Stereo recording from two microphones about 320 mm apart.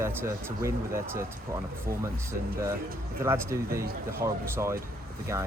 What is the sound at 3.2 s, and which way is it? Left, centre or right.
Speech, centre.